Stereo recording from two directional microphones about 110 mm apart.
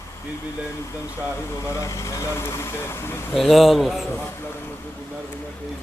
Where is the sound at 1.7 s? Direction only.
25° left (ahead or behind).